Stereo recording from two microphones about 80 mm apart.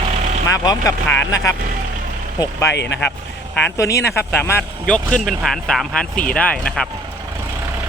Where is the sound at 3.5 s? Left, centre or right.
Centre.